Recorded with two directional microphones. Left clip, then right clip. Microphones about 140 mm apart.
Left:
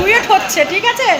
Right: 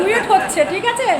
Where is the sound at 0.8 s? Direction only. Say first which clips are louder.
Left 4 dB; 25° left (ahead or behind).